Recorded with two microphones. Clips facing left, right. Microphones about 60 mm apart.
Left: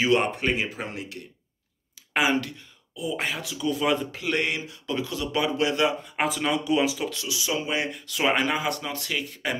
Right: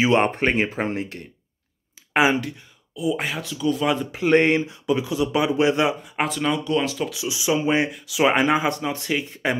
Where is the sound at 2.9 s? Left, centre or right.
Centre.